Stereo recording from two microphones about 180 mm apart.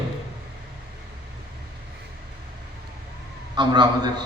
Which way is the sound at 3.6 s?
25° right (ahead or behind).